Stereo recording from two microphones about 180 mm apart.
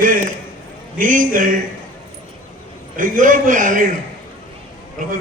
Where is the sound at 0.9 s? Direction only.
50° right (ahead or behind).